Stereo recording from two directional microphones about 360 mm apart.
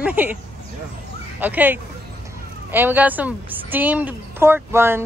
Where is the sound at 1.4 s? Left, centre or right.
Centre.